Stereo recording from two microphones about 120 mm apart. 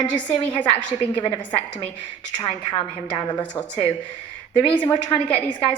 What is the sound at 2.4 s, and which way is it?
Speech, 45° left (ahead or behind).